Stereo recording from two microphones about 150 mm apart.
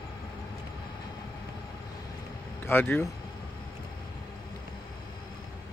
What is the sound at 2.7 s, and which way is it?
Speech, 15° left (ahead or behind).